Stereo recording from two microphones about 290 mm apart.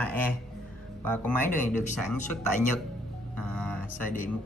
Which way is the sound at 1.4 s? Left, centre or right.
Left.